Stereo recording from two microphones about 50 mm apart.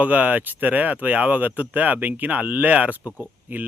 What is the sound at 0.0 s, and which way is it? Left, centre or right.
Speech, right.